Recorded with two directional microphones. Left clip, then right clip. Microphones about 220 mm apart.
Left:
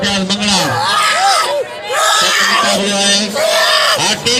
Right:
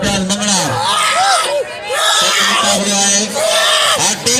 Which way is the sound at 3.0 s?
50° right (ahead or behind).